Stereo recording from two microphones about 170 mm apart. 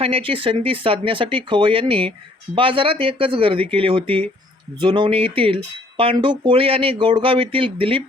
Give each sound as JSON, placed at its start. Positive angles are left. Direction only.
{"t": 0.0, "sound": "speech", "side_deg": -30}